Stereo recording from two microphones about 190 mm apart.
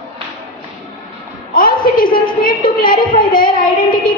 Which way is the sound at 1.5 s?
50° left (ahead or behind).